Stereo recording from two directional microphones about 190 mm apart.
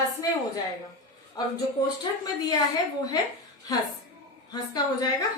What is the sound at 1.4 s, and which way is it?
Speech, 20° left (ahead or behind).